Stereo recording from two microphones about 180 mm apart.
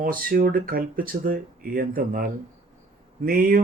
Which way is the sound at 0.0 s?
50° right (ahead or behind).